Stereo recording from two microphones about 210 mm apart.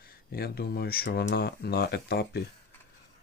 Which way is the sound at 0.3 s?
45° left (ahead or behind).